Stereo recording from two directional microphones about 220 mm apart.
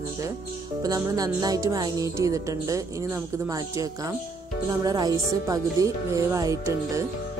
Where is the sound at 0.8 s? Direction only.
15° right (ahead or behind).